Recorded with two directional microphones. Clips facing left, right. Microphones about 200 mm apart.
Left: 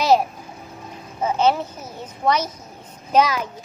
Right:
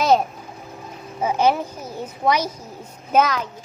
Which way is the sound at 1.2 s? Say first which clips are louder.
Even; 10° right (ahead or behind).